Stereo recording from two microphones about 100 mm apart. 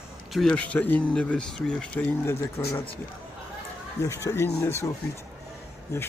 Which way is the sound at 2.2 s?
25° left (ahead or behind).